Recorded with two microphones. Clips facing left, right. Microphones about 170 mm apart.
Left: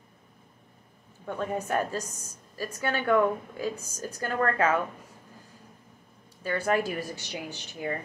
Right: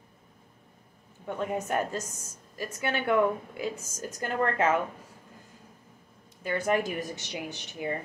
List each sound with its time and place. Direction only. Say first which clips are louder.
1.2 s a woman's voice: even; 15° right (ahead or behind)
6.4 s a woman's voice: even; 15° right (ahead or behind)